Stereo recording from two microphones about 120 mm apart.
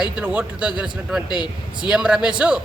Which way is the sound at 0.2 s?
10° right (ahead or behind).